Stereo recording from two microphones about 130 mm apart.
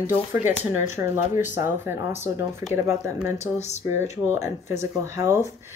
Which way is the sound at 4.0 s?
20° right (ahead or behind).